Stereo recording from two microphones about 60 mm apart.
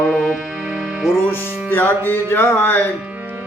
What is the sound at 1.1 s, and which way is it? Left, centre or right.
Music, left.